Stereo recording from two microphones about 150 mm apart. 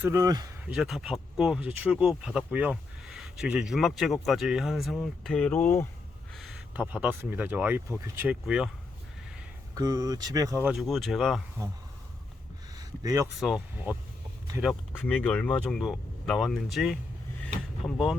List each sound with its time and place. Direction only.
0.0 s speech: 20° right (ahead or behind)
0.6 s speech: 5° right (ahead or behind); by 5.9 s 15° left (ahead or behind)
6.3 s speech: 5° right (ahead or behind); by 8.2 s 20° right (ahead or behind)
8.3 s speech: 5° right (ahead or behind)
9.7 s speech: 25° right (ahead or behind)
10.7 s speech: centre (ahead or behind)
12.7 s a sound: 25° right (ahead or behind)
13.4 s speech: centre (ahead or behind)
15.0 s speech: 10° left (ahead or behind)
17.4 s vehicle: 5° left (ahead or behind)